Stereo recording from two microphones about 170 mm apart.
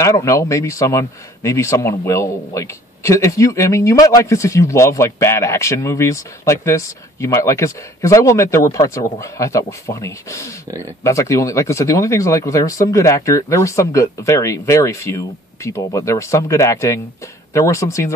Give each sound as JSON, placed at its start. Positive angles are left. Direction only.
{"t": 0.0, "sound": "speech", "side_deg": 15}